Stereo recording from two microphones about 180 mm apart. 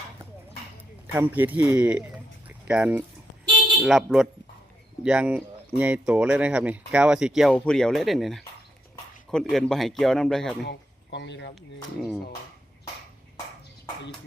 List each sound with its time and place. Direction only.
1.1 s speech: 10° right (ahead or behind)
10.6 s speech: 70° left (ahead or behind)
11.9 s speech: centre (ahead or behind)